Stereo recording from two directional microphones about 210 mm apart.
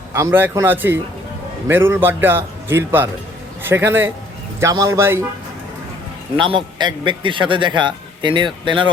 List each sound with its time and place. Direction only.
0.1 s a man's voice: 10° right (ahead or behind)
6.3 s a man's voice: 25° right (ahead or behind)